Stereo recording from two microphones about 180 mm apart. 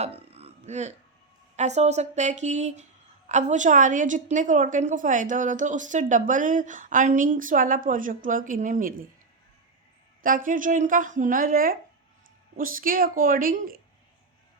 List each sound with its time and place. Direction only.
0.0 s burping: 35° right (ahead or behind)
1.5 s a woman's voice: 40° right (ahead or behind)
10.2 s a woman's voice: 50° right (ahead or behind)